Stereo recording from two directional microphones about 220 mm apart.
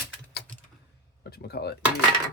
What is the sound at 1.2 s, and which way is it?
Speech, 45° left (ahead or behind).